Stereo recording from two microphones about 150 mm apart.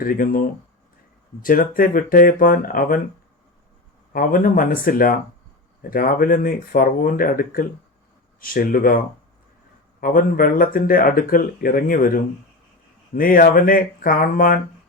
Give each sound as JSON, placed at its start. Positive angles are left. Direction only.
{"t": 0.0, "sound": "speech", "side_deg": 70}
{"t": 4.1, "sound": "speech", "side_deg": 70}